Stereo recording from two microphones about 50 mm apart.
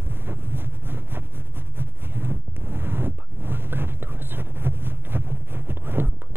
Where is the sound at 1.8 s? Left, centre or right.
Right.